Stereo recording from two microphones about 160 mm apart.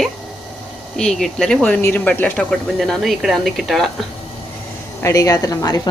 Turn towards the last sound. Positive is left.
turn(degrees=20)  # may be behind; listen again after turning